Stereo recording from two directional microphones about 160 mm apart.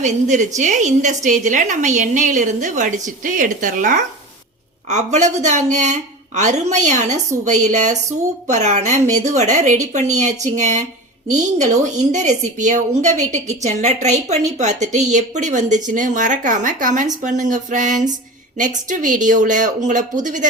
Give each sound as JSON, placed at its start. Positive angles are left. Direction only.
{"t": 0.0, "sound": "a woman's voice", "side_deg": -50}